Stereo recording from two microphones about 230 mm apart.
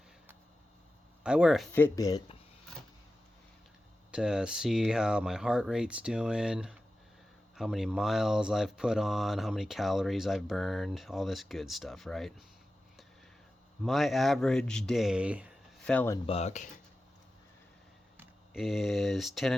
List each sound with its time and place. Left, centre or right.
1.2 s speech: centre
4.1 s speech: centre
13.8 s speech: centre
15.8 s speech: centre
16.2 s speech: left
18.2 s speech: centre